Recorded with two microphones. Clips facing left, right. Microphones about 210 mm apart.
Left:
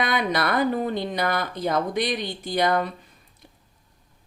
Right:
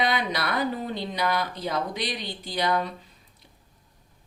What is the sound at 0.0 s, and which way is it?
Speech, 50° left (ahead or behind).